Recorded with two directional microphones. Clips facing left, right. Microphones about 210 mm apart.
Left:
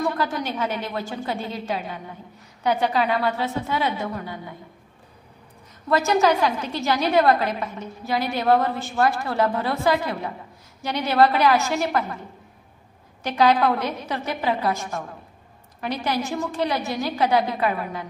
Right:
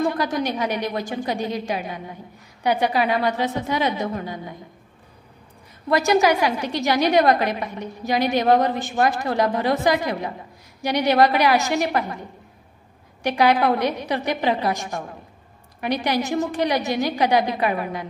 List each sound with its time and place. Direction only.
0.0 s a woman's voice: 15° right (ahead or behind)
5.9 s a woman's voice: 15° right (ahead or behind)